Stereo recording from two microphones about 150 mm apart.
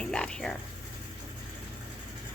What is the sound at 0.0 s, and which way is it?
Speech, 5° left (ahead or behind).